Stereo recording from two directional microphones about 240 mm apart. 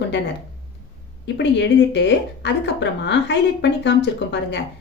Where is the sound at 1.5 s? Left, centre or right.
Left.